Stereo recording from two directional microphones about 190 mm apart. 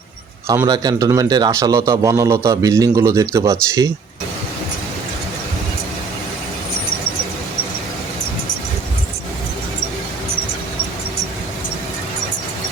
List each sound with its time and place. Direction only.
0.4 s a man's voice: 20° right (ahead or behind)